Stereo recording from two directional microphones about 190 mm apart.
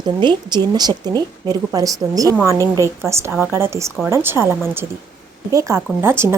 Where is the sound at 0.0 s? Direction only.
25° right (ahead or behind).